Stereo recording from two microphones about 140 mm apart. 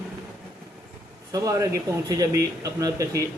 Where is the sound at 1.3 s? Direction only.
25° right (ahead or behind).